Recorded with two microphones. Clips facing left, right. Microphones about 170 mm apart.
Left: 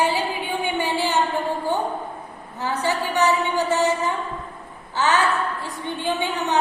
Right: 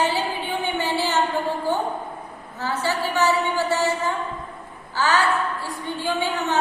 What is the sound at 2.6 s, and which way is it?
A woman's voice, 15° left (ahead or behind).